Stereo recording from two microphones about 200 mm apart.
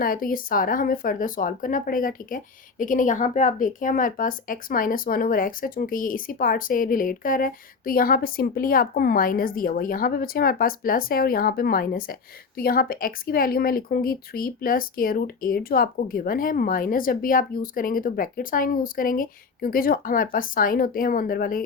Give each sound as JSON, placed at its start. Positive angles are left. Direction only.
{"t": 0.0, "sound": "speech", "side_deg": 45}